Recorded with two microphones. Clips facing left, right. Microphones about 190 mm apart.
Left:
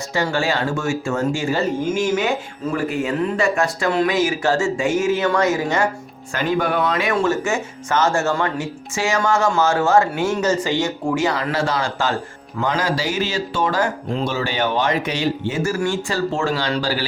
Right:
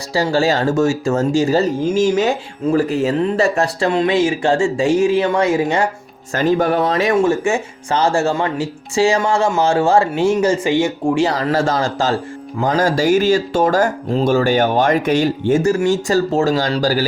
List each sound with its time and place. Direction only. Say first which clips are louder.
0.1 s speech: right 5 dB; 35° right (ahead or behind)
6.3 s speech: right 5 dB; 40° right (ahead or behind)
7.2 s speech: right 4 dB; 25° right (ahead or behind)